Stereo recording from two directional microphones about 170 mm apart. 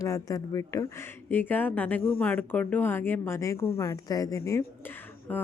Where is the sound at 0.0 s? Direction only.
20° left (ahead or behind).